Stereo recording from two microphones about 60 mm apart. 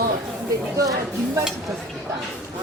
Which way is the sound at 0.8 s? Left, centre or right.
Right.